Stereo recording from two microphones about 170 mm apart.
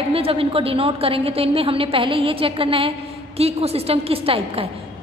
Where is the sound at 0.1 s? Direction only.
35° right (ahead or behind).